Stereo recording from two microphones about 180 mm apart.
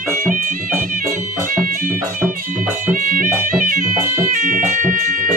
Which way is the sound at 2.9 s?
50° right (ahead or behind).